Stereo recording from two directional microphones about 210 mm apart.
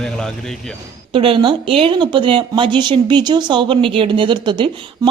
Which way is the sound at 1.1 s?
25° right (ahead or behind).